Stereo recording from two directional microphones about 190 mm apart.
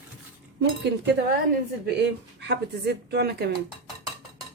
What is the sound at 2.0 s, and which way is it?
Speech, 60° right (ahead or behind).